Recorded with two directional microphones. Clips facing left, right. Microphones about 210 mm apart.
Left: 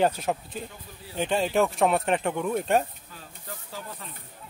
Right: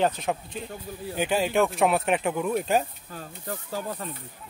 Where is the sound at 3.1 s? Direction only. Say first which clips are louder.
Right 7 dB; 50° right (ahead or behind).